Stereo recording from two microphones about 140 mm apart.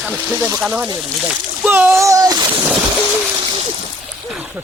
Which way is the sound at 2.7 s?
5° right (ahead or behind).